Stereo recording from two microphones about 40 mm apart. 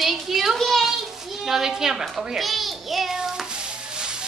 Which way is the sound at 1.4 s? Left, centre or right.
Centre.